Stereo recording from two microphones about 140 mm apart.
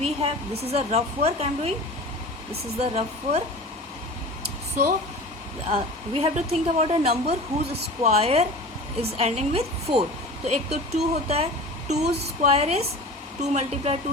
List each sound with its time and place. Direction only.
0.0 s a woman's voice: 45° right (ahead or behind)
2.8 s a woman's voice: 50° right (ahead or behind)
6.1 s a woman's voice: 45° right (ahead or behind)